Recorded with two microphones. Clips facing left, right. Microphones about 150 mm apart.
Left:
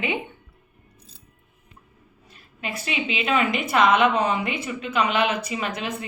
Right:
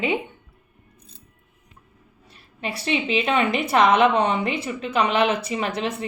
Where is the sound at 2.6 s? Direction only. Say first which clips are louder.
Right 4 dB; 35° right (ahead or behind).